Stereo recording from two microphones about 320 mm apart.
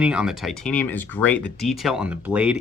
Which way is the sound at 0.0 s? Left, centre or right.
Centre.